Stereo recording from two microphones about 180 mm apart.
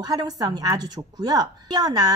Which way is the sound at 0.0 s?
20° right (ahead or behind).